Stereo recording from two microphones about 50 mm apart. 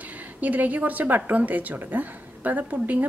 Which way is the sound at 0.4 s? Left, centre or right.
Right.